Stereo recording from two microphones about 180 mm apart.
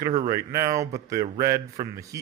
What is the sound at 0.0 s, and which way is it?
Speech, 20° right (ahead or behind).